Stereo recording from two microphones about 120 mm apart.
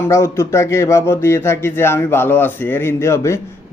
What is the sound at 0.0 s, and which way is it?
Speech, 25° left (ahead or behind).